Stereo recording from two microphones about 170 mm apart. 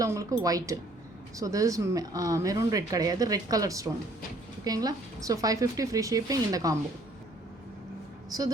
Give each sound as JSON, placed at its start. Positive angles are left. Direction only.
{"t": 0.0, "sound": "speech", "side_deg": -20}
{"t": 8.3, "sound": "a woman's voice", "side_deg": -20}